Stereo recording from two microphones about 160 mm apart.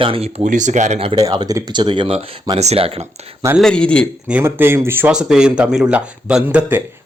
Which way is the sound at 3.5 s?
5° left (ahead or behind).